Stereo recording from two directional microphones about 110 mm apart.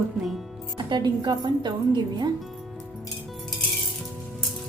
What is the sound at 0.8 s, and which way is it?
Speech, 45° right (ahead or behind).